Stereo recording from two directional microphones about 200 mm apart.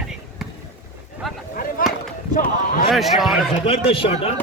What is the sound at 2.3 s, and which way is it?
Run, 45° left (ahead or behind).